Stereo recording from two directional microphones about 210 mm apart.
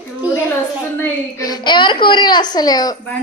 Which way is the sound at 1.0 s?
15° left (ahead or behind).